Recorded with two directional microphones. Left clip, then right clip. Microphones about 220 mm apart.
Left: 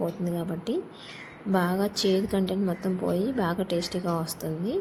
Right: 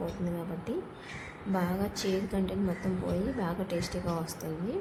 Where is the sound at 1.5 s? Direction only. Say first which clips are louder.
Left 7 dB; 25° left (ahead or behind).